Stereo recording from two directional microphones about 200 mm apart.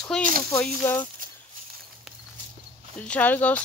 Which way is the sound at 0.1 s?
5° left (ahead or behind).